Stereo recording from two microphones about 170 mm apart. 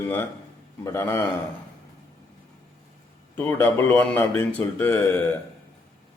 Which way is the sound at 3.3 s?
15° left (ahead or behind).